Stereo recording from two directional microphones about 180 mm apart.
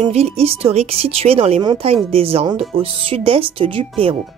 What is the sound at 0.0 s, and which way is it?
Speech, 35° right (ahead or behind).